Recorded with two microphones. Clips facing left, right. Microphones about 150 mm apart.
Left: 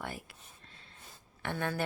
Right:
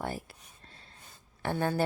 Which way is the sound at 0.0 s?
35° right (ahead or behind).